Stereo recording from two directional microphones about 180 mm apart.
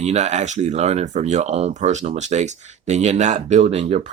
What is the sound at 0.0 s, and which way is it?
Speech, 40° right (ahead or behind).